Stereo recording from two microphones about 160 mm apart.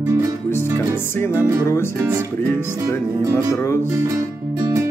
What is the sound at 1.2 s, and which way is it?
Music, 15° left (ahead or behind).